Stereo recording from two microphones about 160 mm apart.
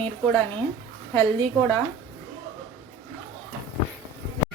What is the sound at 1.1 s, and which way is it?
Speech, 10° left (ahead or behind).